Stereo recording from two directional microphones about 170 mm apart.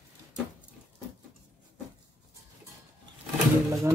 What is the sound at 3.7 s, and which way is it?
Speech, 15° right (ahead or behind).